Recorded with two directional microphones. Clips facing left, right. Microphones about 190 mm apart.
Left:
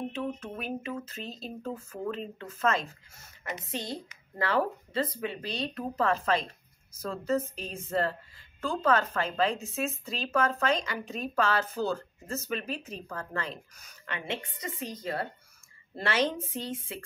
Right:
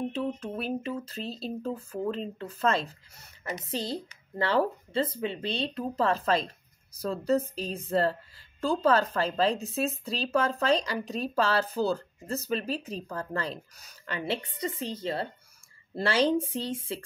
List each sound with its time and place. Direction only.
0.4 s speech: 35° right (ahead or behind)